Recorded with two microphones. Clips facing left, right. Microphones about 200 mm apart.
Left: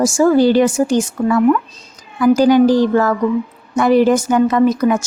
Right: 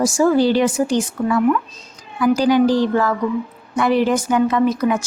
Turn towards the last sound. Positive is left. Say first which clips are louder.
# left 4 dB
turn(degrees=45)  # may be behind; listen again after turning